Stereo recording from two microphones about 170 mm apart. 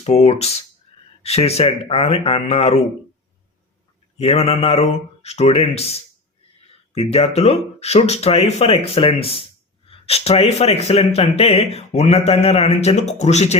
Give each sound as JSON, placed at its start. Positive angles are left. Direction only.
{"t": 0.0, "sound": "speech", "side_deg": 35}
{"t": 4.2, "sound": "speech", "side_deg": 35}